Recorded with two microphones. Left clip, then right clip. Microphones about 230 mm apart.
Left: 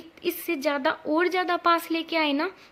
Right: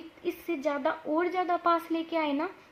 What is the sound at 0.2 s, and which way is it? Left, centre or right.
A woman's voice, left.